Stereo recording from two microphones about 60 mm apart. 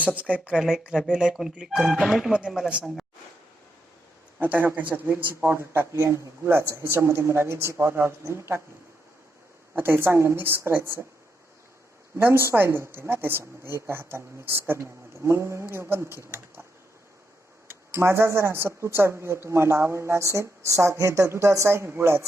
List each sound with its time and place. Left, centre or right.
0.0 s speech: right
0.5 s speech: centre
4.4 s speech: right
5.9 s speech: right
6.4 s speech: right
9.7 s a woman's voice: right
12.1 s speech: right
17.7 s speech: right